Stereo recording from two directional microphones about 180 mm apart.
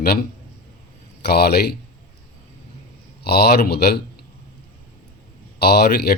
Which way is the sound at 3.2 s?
65° left (ahead or behind).